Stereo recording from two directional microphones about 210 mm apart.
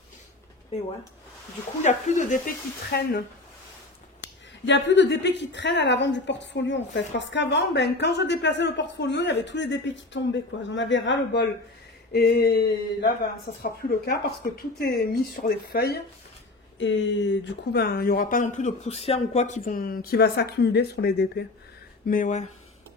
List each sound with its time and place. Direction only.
1.8 s speech: 35° left (ahead or behind); by 11.4 s 60° left (ahead or behind)
12.1 s speech: 50° left (ahead or behind)
16.7 s speech: 60° left (ahead or behind)
22.0 s speech: 40° left (ahead or behind)